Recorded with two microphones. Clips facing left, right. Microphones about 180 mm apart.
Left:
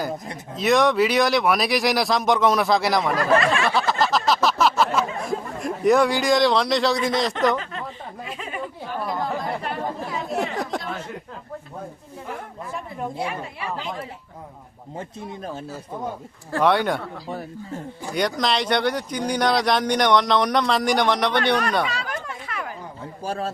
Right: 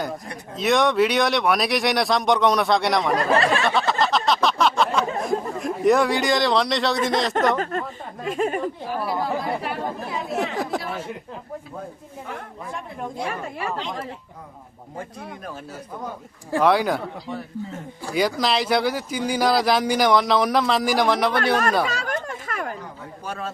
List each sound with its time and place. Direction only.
0.5 s speech: centre (ahead or behind)
3.3 s a sound: 35° right (ahead or behind)
3.6 s a sound: centre (ahead or behind)
7.6 s speech: 45° right (ahead or behind)
9.0 s speech: 5° right (ahead or behind)
13.2 s speech: 45° right (ahead or behind)
14.9 s speech: 25° left (ahead or behind)
16.6 s speech: centre (ahead or behind)
18.1 s speech: centre (ahead or behind)
21.8 s a sound: 45° right (ahead or behind)
23.2 s a man's voice: 30° left (ahead or behind)